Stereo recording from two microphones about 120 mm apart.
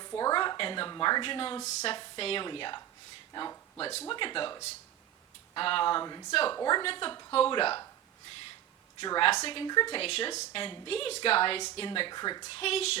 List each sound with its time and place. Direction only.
0.0 s a sound: 35° left (ahead or behind)
0.9 s speech: 35° left (ahead or behind)
1.6 s a woman's voice: 55° left (ahead or behind)
5.5 s speech: 45° left (ahead or behind)
6.8 s a woman's voice: 50° left (ahead or behind)
7.1 s speech: 30° left (ahead or behind)
7.3 s a woman's voice: 50° left (ahead or behind)
9.0 s a woman's voice: 45° left (ahead or behind)
10.0 s a woman's voice: 50° left (ahead or behind); by 12.5 s 35° left (ahead or behind)
12.5 s a woman's voice: 55° left (ahead or behind)